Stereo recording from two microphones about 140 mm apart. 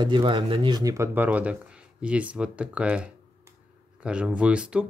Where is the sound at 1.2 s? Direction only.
10° right (ahead or behind).